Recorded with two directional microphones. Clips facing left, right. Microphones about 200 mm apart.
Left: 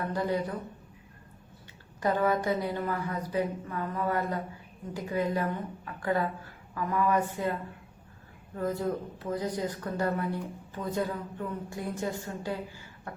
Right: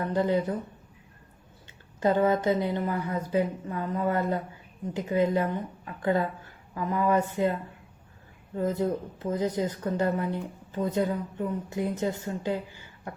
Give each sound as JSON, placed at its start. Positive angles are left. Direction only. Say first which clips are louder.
{"t": 0.1, "sound": "speech", "louder": "right 6 dB", "side_deg": -25}
{"t": 2.0, "sound": "speech", "louder": "right 4 dB", "side_deg": -25}
{"t": 8.5, "sound": "speech", "louder": "right 3 dB", "side_deg": -20}